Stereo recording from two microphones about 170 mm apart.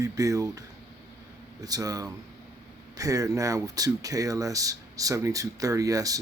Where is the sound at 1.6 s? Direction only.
20° right (ahead or behind).